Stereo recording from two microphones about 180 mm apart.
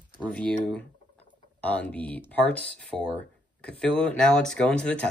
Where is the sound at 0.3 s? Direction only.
5° left (ahead or behind).